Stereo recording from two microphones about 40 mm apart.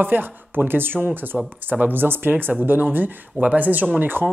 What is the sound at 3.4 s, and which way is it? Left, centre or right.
Speech, right.